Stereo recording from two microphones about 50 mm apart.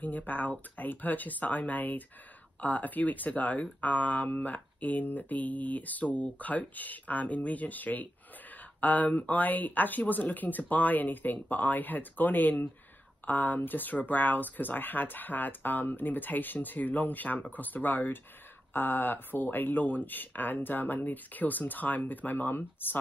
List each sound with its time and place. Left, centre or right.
0.0 s speech: left